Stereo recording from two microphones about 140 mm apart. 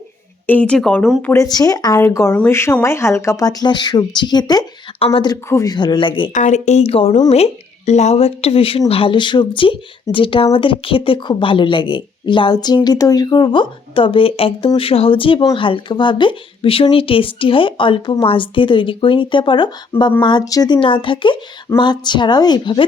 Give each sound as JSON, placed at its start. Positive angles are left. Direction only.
{"t": 0.4, "sound": "speech", "side_deg": 10}
{"t": 1.2, "sound": "speech", "side_deg": 15}
{"t": 1.5, "sound": "speech", "side_deg": 25}
{"t": 4.9, "sound": "speech", "side_deg": 45}
{"t": 5.2, "sound": "speech", "side_deg": 25}
{"t": 6.3, "sound": "speech", "side_deg": 60}
{"t": 20.7, "sound": "speech", "side_deg": 40}